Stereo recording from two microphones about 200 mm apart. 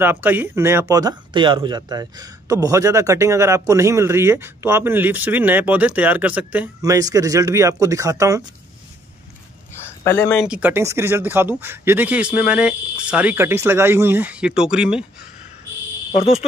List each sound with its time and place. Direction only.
0.0 s speech: 10° right (ahead or behind)
6.8 s speech: 20° right (ahead or behind)
10.0 s speech: 15° left (ahead or behind)
10.3 s speech: 5° right (ahead or behind)